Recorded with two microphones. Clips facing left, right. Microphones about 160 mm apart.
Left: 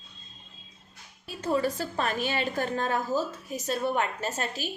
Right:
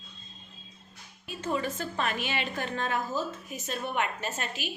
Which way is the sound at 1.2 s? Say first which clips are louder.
Left 4 dB; 35° left (ahead or behind).